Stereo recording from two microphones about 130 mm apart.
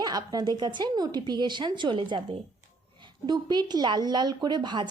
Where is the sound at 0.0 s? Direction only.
30° right (ahead or behind).